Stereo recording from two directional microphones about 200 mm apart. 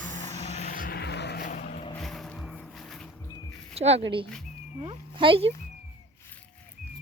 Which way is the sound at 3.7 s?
30° right (ahead or behind).